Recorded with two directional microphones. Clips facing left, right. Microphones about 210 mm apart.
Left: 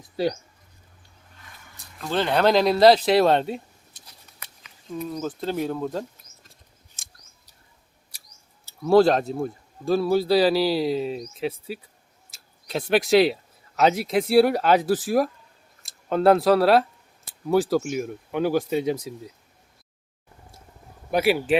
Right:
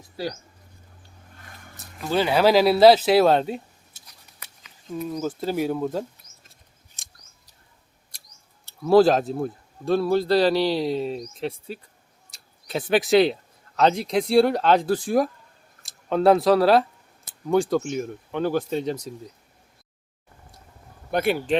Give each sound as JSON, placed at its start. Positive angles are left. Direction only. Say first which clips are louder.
{"t": 2.0, "sound": "speech", "louder": "right 2 dB", "side_deg": -5}
{"t": 5.1, "sound": "speech", "louder": "right 2 dB", "side_deg": -5}
{"t": 7.0, "sound": "scissors", "louder": "right 1 dB", "side_deg": 0}
{"t": 8.6, "sound": "speech", "louder": "right 1 dB", "side_deg": 0}
{"t": 21.1, "sound": "speech", "louder": "left 2 dB", "side_deg": 5}